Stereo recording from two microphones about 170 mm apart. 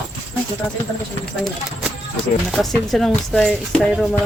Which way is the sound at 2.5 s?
Centre (ahead or behind).